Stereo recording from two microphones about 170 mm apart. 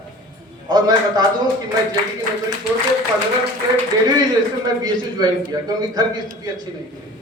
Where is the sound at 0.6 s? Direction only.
25° right (ahead or behind).